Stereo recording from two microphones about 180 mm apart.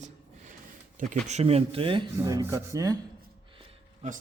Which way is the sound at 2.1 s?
15° right (ahead or behind).